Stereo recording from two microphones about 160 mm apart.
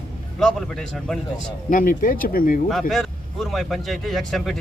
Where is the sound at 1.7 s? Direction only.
60° left (ahead or behind).